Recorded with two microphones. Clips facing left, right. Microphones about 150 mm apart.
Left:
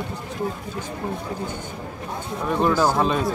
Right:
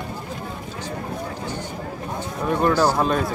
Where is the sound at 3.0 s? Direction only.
Centre (ahead or behind).